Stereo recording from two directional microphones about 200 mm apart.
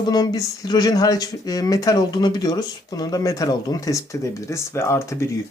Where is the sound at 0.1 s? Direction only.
20° left (ahead or behind).